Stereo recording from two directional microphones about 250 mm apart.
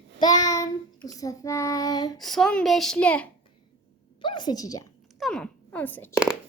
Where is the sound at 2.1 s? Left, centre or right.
Centre.